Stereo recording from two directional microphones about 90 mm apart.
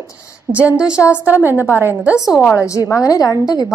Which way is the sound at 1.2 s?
20° right (ahead or behind).